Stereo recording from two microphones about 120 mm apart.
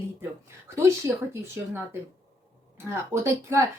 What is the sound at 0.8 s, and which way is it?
Speech, 20° right (ahead or behind).